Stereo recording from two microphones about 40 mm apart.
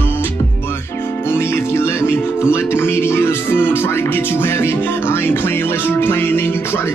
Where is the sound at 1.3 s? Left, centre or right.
Left.